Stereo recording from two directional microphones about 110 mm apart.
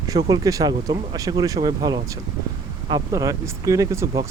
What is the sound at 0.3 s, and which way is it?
Speech, 35° right (ahead or behind).